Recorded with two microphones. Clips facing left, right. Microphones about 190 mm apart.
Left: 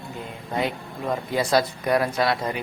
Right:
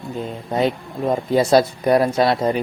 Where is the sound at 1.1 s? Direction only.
25° right (ahead or behind).